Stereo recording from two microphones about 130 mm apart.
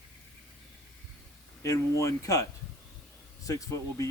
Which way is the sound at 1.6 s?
25° left (ahead or behind).